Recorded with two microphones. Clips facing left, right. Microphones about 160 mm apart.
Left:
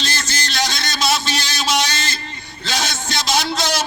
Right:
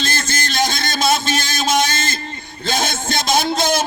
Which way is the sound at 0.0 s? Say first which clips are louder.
Right 3 dB; 50° right (ahead or behind).